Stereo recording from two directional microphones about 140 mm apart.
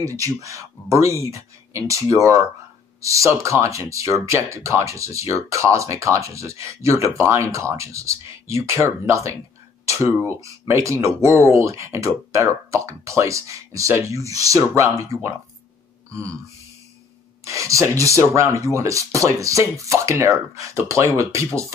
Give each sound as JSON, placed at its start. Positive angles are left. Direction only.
{"t": 0.0, "sound": "speech", "side_deg": -25}
{"t": 10.4, "sound": "speech", "side_deg": -20}
{"t": 17.5, "sound": "speech", "side_deg": -20}